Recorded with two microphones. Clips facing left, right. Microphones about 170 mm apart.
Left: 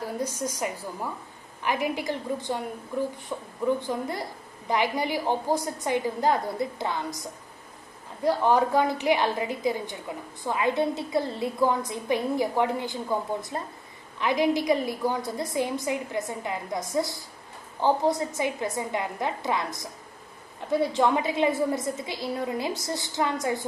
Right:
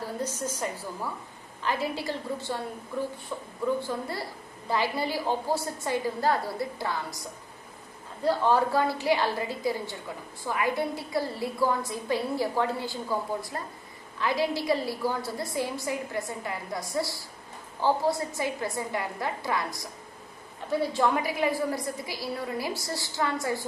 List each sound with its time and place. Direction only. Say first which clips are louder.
0.0 s a woman's voice: left 2 dB; 15° left (ahead or behind)
20.9 s a woman's voice: left 2 dB; 20° left (ahead or behind)